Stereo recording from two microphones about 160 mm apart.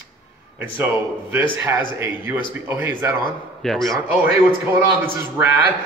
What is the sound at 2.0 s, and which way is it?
A man's voice, 15° right (ahead or behind).